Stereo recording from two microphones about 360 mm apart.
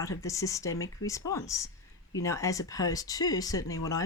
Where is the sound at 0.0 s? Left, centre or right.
Centre.